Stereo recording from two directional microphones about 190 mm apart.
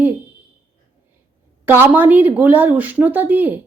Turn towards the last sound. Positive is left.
turn(degrees=-10)  # may be behind; listen again after turning